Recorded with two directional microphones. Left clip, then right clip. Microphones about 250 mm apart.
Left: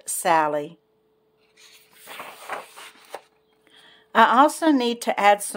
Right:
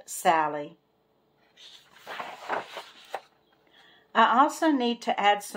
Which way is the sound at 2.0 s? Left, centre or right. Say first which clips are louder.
Right 1 dB; centre.